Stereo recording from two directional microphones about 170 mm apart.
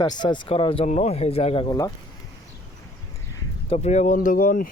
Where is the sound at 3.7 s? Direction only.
45° left (ahead or behind).